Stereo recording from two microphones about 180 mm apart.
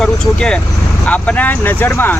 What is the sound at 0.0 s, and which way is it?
Speech, 5° left (ahead or behind).